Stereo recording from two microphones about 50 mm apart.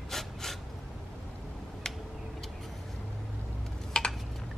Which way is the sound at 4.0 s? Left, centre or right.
Centre.